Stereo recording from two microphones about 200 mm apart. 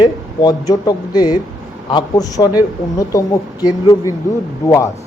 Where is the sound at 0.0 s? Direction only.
20° left (ahead or behind).